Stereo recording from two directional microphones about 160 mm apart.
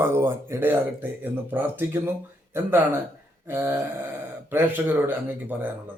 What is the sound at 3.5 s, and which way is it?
A man's voice, 15° right (ahead or behind).